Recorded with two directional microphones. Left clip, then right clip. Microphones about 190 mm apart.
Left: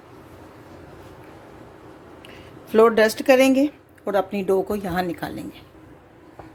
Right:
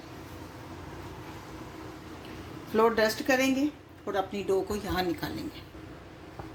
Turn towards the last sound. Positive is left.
turn(degrees=45)  # may be behind; listen again after turning